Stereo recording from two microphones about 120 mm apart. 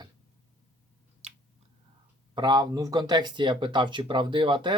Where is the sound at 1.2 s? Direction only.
60° right (ahead or behind).